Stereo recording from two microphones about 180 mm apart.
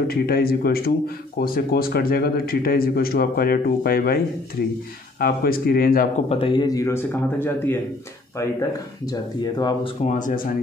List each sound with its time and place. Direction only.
0.1 s speech: 55° left (ahead or behind)
5.2 s speech: 55° left (ahead or behind)
6.2 s speech: 30° left (ahead or behind)
10.1 s speech: 50° left (ahead or behind)